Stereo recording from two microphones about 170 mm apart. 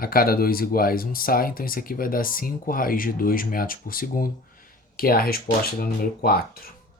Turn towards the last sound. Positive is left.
turn(degrees=60)  # may be behind; listen again after turning